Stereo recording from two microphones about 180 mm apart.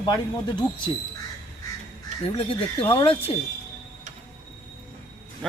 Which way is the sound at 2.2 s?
30° left (ahead or behind).